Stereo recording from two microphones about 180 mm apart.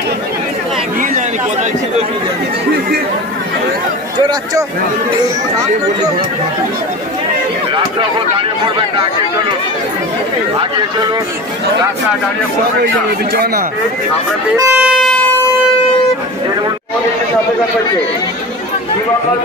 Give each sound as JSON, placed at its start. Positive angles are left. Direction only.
{"t": 1.1, "sound": "a man's voice", "side_deg": -40}
{"t": 13.3, "sound": "speech", "side_deg": -55}
{"t": 14.6, "sound": "a sound", "side_deg": -10}